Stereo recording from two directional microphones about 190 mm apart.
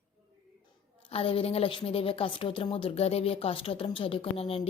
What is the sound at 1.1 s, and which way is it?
A woman's voice, 30° left (ahead or behind).